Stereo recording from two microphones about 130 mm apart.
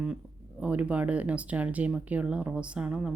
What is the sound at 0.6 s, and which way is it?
Speech, 10° right (ahead or behind).